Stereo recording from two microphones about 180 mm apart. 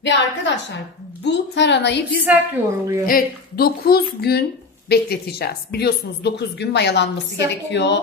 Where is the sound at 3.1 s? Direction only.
55° left (ahead or behind).